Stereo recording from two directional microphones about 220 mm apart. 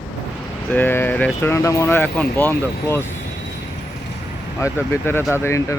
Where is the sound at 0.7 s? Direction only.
10° left (ahead or behind).